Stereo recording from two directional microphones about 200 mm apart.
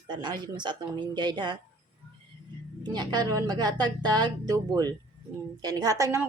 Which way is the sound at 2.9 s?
20° right (ahead or behind).